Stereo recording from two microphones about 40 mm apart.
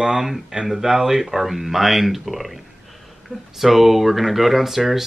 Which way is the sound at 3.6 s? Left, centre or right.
Centre.